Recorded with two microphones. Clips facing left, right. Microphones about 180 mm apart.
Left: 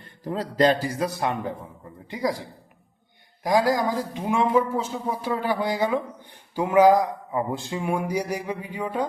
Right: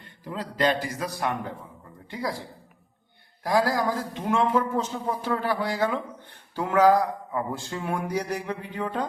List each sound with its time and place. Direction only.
0.0 s a man's voice: 40° left (ahead or behind); by 2.4 s 15° left (ahead or behind)
3.4 s speech: 15° left (ahead or behind)